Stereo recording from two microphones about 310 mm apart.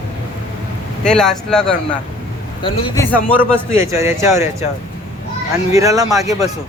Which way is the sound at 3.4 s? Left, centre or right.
Centre.